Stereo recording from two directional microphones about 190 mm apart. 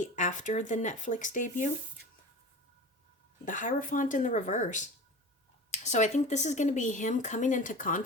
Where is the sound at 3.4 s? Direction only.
45° left (ahead or behind).